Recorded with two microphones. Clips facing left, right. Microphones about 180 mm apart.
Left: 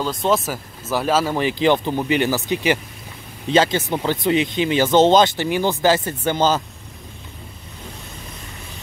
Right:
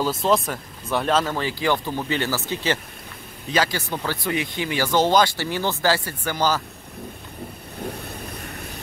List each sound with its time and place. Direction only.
0.0 s speech: 5° right (ahead or behind)
1.3 s speech: 20° left (ahead or behind)